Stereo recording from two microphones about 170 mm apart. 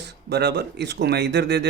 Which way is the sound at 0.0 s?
75° right (ahead or behind).